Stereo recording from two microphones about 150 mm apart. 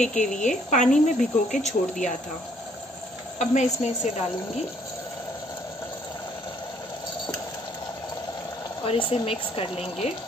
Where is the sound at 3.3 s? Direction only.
50° left (ahead or behind).